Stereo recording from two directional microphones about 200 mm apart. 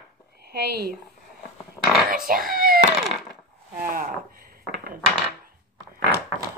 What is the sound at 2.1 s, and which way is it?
Cat, 45° right (ahead or behind).